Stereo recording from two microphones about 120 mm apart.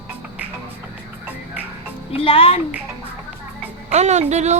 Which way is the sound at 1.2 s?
15° right (ahead or behind).